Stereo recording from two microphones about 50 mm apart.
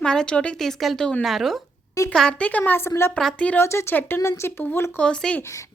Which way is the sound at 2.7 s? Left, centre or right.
Left.